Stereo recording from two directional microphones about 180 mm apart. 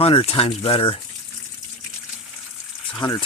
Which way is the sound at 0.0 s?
35° left (ahead or behind).